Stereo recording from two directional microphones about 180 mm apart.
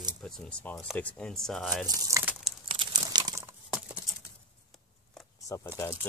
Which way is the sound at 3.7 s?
5° right (ahead or behind).